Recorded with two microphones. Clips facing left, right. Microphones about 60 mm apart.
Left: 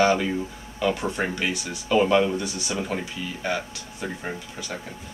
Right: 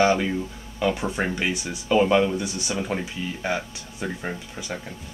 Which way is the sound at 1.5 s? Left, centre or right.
Right.